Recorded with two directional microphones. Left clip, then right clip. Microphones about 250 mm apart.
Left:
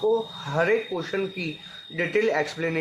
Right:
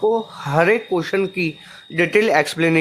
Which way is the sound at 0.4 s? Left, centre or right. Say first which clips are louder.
Right 8 dB; right.